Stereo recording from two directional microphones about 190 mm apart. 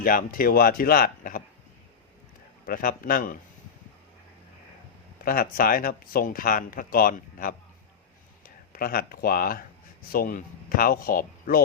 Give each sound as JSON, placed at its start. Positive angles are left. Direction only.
{"t": 0.0, "sound": "speech", "side_deg": 50}
{"t": 2.6, "sound": "speech", "side_deg": 50}
{"t": 5.2, "sound": "speech", "side_deg": 50}